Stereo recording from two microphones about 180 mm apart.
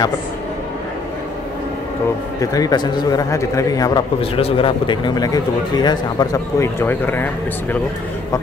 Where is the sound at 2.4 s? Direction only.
20° left (ahead or behind).